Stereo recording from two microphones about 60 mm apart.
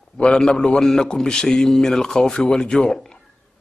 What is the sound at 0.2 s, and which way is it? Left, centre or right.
Speech, centre.